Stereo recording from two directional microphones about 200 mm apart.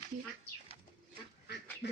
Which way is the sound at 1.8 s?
55° left (ahead or behind).